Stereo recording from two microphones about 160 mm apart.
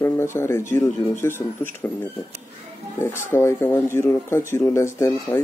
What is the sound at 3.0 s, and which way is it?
Speech, 15° left (ahead or behind).